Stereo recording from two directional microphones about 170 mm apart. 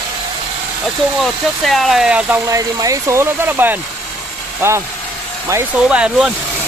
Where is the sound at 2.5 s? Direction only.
20° right (ahead or behind).